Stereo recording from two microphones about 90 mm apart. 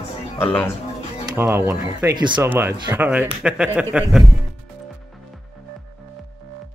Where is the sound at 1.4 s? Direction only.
25° right (ahead or behind).